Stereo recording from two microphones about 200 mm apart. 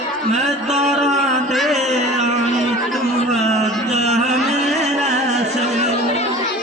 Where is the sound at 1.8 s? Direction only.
35° right (ahead or behind).